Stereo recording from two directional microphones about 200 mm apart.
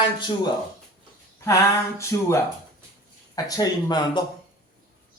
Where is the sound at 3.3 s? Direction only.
20° left (ahead or behind).